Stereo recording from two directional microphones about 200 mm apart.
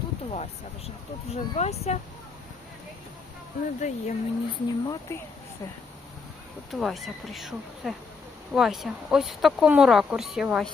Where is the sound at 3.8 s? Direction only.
35° left (ahead or behind).